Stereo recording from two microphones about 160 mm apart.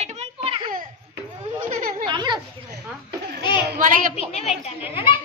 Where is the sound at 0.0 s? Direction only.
45° right (ahead or behind).